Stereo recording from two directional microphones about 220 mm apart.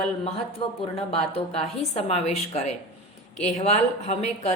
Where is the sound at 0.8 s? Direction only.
25° left (ahead or behind).